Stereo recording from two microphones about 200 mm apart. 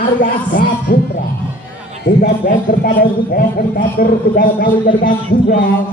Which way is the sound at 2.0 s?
50° left (ahead or behind).